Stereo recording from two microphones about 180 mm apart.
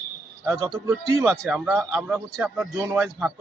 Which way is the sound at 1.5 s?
5° right (ahead or behind).